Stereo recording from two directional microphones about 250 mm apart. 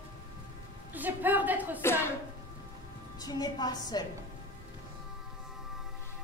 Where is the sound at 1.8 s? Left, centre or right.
Centre.